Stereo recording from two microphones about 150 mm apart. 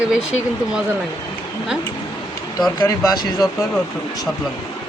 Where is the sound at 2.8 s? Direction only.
25° left (ahead or behind).